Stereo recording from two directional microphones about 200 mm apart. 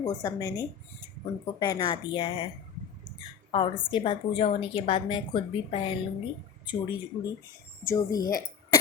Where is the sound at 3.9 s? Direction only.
30° left (ahead or behind).